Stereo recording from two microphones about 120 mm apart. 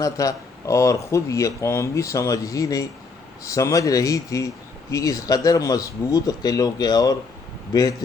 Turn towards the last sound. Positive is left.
turn(degrees=30)  # may be behind; listen again after turning